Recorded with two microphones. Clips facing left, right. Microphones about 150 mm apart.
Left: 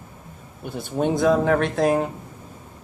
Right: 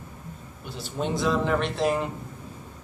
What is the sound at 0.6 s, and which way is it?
Speech, 55° left (ahead or behind).